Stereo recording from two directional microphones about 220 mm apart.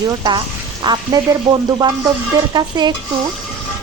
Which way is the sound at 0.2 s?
20° right (ahead or behind).